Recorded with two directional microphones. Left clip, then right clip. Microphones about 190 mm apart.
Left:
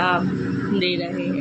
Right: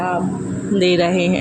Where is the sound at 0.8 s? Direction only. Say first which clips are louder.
Right 9 dB; 40° right (ahead or behind).